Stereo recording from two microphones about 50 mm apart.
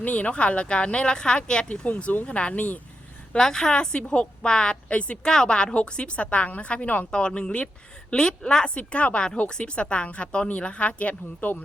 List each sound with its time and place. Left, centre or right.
0.0 s speech: left
3.3 s speech: centre; by 7.1 s left
7.1 s a woman's voice: centre